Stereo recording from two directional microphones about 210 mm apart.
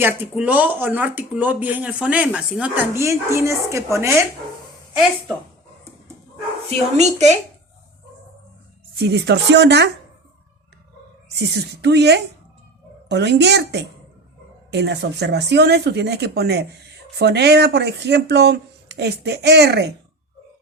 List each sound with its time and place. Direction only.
0.0 s speech: 10° right (ahead or behind)
6.7 s speech: 30° right (ahead or behind)
9.0 s speech: 55° right (ahead or behind)
11.3 s speech: 55° right (ahead or behind)